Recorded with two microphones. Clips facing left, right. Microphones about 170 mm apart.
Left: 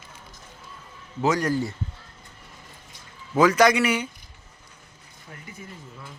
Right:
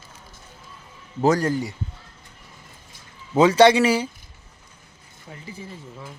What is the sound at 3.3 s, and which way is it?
Speech, 30° right (ahead or behind).